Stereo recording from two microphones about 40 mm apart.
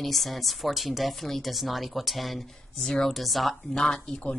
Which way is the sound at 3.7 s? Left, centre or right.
Centre.